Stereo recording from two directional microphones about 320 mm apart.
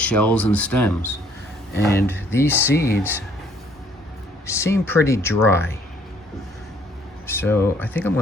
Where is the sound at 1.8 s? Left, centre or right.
Left.